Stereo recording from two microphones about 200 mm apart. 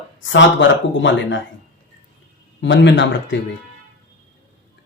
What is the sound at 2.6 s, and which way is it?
Speech, 65° left (ahead or behind).